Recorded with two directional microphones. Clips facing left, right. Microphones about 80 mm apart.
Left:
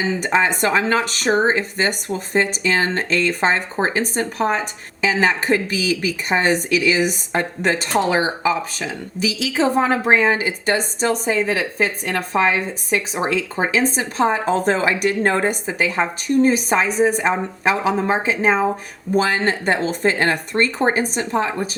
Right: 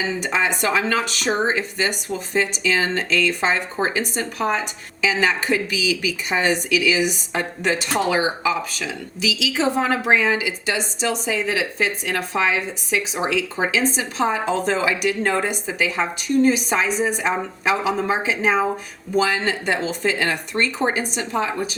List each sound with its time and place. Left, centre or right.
0.2 s speech: left